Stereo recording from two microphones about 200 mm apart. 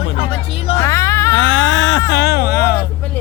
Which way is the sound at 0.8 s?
15° left (ahead or behind).